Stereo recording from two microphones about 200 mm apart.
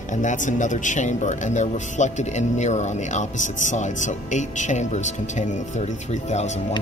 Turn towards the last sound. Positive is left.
turn(degrees=35)  # may be behind; listen again after turning